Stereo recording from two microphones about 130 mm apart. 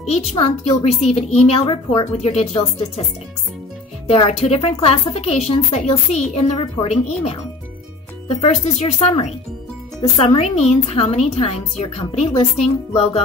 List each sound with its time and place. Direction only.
0.1 s a woman's voice: 55° left (ahead or behind)
2.2 s a woman's voice: 55° left (ahead or behind)
4.3 s a woman's voice: 55° left (ahead or behind)
8.4 s a woman's voice: 55° left (ahead or behind)
10.1 s a woman's voice: 50° left (ahead or behind)